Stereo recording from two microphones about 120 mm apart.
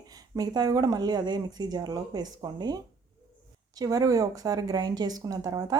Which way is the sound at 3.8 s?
30° right (ahead or behind).